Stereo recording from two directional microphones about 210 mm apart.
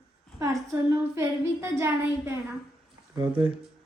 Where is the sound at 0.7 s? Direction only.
15° right (ahead or behind).